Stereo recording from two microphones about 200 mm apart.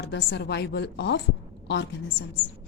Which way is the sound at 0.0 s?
55° left (ahead or behind).